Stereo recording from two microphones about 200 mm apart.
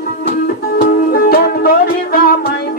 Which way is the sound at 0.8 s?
50° left (ahead or behind).